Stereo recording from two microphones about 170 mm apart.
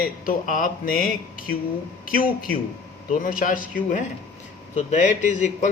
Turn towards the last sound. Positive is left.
turn(degrees=45)  # may be behind; listen again after turning